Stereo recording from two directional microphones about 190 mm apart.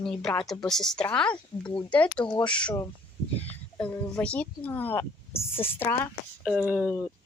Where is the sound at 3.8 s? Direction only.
5° left (ahead or behind).